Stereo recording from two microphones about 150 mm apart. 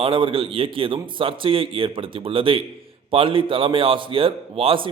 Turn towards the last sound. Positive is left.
turn(degrees=-40)  # may be behind; listen again after turning